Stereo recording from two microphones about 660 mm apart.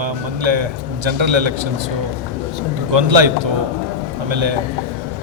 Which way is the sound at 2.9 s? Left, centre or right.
Right.